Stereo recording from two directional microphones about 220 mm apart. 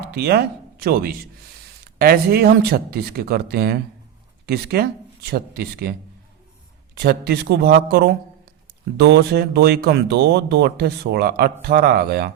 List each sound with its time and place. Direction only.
0.0 s speech: 45° right (ahead or behind)
6.9 s speech: 45° right (ahead or behind)